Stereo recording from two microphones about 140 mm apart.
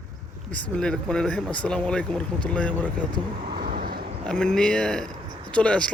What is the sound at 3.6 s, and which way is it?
Vehicle, 90° right.